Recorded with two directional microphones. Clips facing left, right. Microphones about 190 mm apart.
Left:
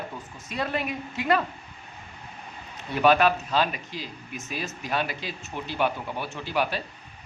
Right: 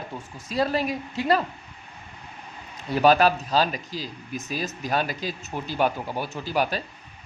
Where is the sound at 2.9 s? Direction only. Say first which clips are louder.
Right 2 dB; 35° right (ahead or behind).